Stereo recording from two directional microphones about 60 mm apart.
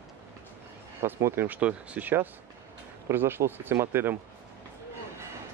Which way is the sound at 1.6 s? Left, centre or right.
Right.